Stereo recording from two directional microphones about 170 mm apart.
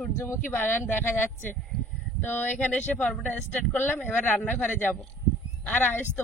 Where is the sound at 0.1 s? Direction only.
15° left (ahead or behind).